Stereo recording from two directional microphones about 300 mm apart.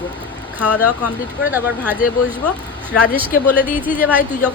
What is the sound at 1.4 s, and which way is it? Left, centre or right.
A woman's voice, centre.